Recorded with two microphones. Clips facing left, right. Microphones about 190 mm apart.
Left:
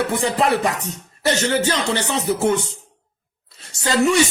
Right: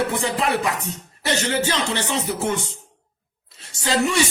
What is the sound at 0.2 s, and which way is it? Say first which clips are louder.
Speech: left 4 dB; 40° left (ahead or behind).